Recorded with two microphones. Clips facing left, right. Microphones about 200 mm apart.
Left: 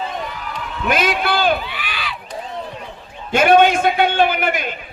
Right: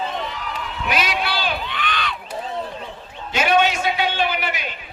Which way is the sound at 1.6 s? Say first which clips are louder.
Right 2 dB; 10° left (ahead or behind).